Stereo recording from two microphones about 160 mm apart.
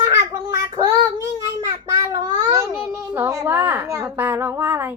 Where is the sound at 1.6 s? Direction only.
20° right (ahead or behind).